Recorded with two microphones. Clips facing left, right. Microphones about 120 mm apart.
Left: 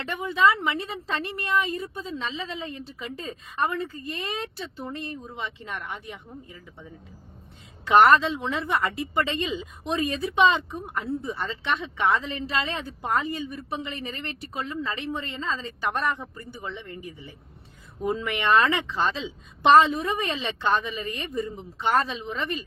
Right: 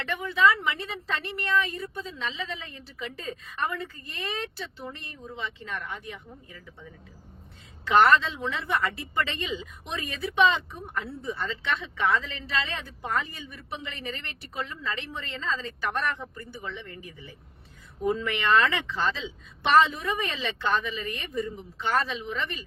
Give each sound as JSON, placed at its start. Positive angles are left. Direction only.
{"t": 0.1, "sound": "a woman's voice", "side_deg": 20}
{"t": 7.9, "sound": "a woman's voice", "side_deg": 20}